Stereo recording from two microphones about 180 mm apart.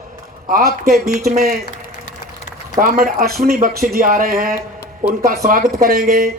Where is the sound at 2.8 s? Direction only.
55° right (ahead or behind).